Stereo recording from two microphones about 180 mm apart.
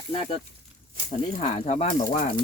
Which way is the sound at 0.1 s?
35° left (ahead or behind).